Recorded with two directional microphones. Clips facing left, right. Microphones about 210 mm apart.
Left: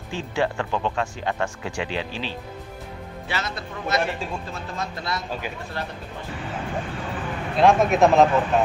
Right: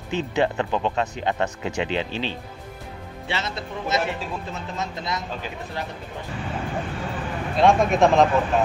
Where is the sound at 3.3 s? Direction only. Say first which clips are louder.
Right 1 dB; 25° right (ahead or behind).